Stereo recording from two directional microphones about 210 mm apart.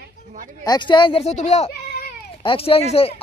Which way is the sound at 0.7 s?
20° left (ahead or behind).